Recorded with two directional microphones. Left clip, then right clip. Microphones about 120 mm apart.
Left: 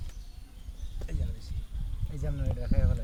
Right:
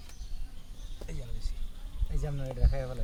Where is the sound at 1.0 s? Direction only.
10° left (ahead or behind).